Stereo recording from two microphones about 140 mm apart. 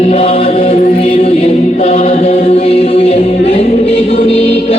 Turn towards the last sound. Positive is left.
turn(degrees=50)  # may be behind; listen again after turning